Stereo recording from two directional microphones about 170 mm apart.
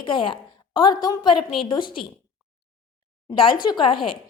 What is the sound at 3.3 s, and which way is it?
Speech, 30° left (ahead or behind).